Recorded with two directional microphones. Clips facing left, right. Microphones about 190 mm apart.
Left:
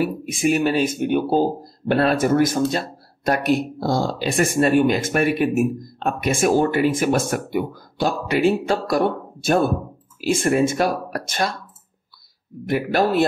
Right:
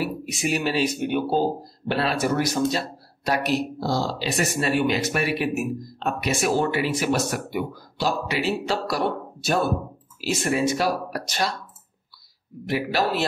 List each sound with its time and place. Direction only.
0.0 s speech: 50° left (ahead or behind)
12.6 s speech: 50° left (ahead or behind)